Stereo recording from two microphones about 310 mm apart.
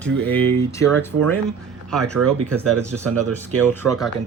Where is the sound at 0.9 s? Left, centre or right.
Right.